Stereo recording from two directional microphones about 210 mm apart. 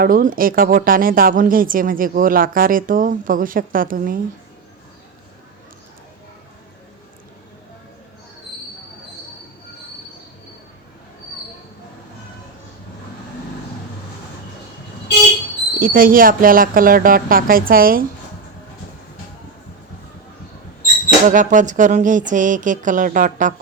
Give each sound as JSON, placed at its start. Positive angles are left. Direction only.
{"t": 0.0, "sound": "speech", "side_deg": -40}
{"t": 15.8, "sound": "speech", "side_deg": -40}
{"t": 21.2, "sound": "speech", "side_deg": -35}